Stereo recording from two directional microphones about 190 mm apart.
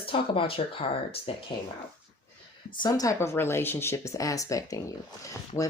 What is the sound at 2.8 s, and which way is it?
Speech, 20° left (ahead or behind).